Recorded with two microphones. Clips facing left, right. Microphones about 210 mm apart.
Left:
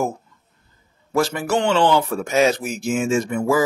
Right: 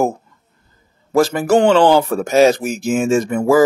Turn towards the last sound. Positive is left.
turn(degrees=-45)  # may be behind; listen again after turning